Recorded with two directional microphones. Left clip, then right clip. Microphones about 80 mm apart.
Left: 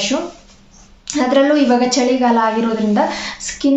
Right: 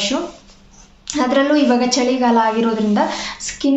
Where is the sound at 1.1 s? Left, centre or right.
Right.